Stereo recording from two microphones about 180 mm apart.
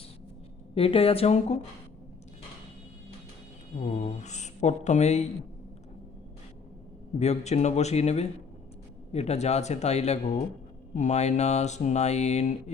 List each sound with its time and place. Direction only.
0.7 s speech: 30° left (ahead or behind)
3.8 s speech: 40° left (ahead or behind)
7.2 s speech: 35° left (ahead or behind)